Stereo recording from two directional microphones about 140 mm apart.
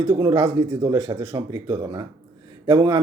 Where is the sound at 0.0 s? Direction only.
25° right (ahead or behind).